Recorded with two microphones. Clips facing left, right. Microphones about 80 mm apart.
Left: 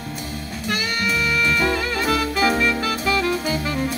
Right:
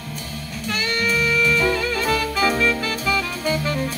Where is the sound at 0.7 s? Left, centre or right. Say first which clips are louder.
Right 2 dB; centre.